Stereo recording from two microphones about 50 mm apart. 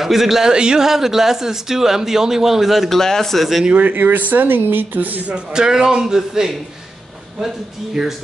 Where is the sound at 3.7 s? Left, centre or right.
Right.